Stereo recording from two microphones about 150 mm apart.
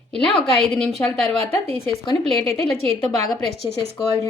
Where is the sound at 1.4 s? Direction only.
40° right (ahead or behind).